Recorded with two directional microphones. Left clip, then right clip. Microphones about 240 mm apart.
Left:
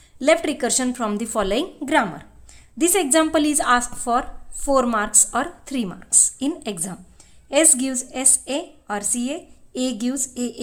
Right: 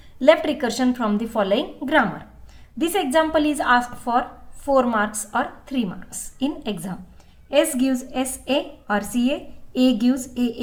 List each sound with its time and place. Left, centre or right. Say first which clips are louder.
0.2 s a woman's voice: right 2 dB; left